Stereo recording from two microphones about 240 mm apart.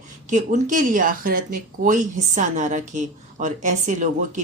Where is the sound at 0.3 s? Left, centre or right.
Right.